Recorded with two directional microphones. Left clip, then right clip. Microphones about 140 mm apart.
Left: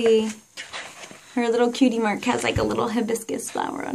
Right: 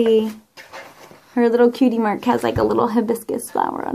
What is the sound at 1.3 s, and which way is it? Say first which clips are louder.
A woman's voice: right 6 dB; 50° right (ahead or behind).